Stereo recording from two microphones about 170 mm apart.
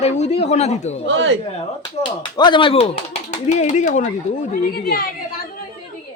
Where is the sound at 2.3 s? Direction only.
25° left (ahead or behind).